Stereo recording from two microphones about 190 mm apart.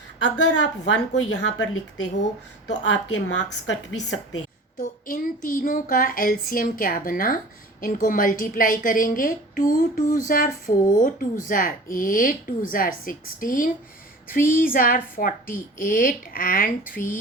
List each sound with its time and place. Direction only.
0.3 s a woman's voice: 70° left (ahead or behind)
4.8 s a woman's voice: 45° left (ahead or behind)